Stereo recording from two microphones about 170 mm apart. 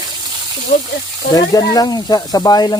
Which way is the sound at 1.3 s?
20° left (ahead or behind).